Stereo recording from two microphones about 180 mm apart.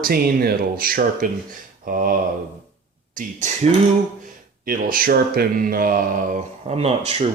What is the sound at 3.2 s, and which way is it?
Speech, 45° right (ahead or behind).